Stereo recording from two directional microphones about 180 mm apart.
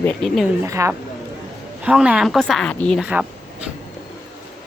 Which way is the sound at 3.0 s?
5° right (ahead or behind).